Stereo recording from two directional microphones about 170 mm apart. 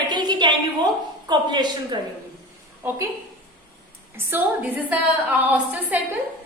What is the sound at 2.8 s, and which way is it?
Speech, 15° right (ahead or behind).